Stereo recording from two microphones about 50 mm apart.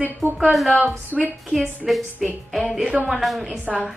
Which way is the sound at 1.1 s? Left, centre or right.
Right.